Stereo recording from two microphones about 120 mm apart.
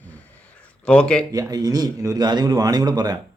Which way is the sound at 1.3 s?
30° right (ahead or behind).